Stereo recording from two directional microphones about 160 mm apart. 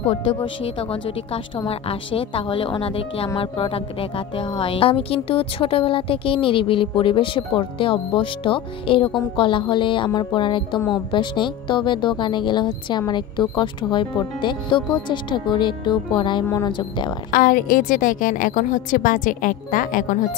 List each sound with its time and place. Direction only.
0.1 s speech: 30° left (ahead or behind)
17.3 s a woman's voice: 60° left (ahead or behind)